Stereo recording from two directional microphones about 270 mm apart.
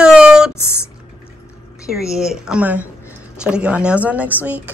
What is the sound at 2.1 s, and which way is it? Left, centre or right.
Speech, centre.